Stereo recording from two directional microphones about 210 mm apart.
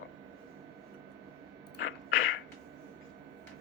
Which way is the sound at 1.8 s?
80° left.